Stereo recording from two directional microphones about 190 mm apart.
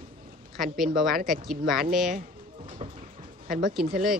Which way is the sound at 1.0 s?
Centre (ahead or behind).